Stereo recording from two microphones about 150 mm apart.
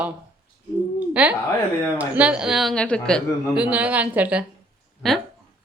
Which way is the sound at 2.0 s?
10° right (ahead or behind).